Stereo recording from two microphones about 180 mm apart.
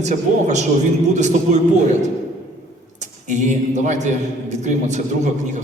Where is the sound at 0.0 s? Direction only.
40° right (ahead or behind).